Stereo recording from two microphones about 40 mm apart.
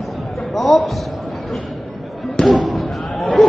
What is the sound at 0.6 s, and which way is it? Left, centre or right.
Speech, centre.